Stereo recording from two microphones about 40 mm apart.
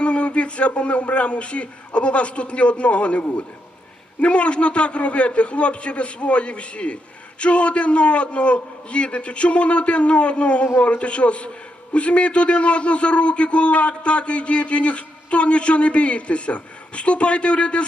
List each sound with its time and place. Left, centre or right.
0.0 s a man's voice: left